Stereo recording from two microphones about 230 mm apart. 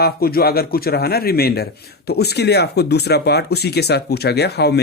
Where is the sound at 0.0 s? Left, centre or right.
Left.